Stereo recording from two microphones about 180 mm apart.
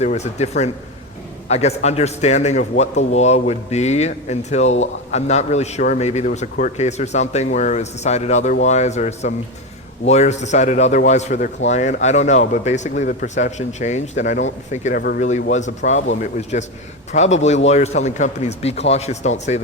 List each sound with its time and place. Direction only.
0.0 s a man's voice: 40° left (ahead or behind)
14.9 s speech: 60° left (ahead or behind)
15.2 s a man's voice: 40° left (ahead or behind)